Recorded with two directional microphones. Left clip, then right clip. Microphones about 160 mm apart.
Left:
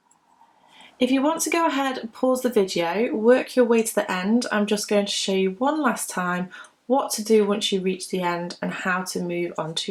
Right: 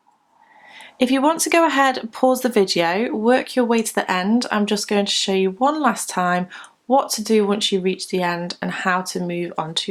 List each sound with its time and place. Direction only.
1.0 s speech: 35° right (ahead or behind)